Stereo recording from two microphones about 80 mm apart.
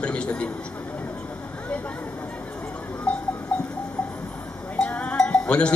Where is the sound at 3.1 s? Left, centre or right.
Centre.